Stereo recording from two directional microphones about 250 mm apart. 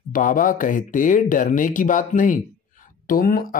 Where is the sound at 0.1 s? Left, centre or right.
Left.